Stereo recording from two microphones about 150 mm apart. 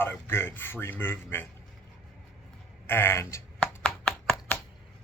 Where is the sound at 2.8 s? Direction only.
15° left (ahead or behind).